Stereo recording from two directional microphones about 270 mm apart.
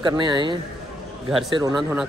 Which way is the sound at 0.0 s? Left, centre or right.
Centre.